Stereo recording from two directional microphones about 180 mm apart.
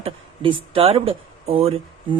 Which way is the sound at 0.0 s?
30° right (ahead or behind).